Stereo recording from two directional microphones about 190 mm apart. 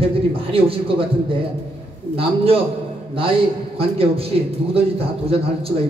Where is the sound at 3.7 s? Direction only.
30° right (ahead or behind).